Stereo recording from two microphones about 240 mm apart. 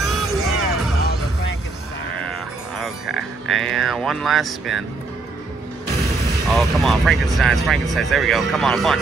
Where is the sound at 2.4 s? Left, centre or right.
Centre.